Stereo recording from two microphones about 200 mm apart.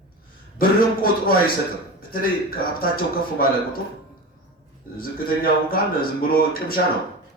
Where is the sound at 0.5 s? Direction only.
45° left (ahead or behind).